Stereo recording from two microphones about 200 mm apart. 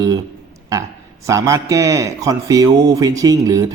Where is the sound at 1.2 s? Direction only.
15° right (ahead or behind).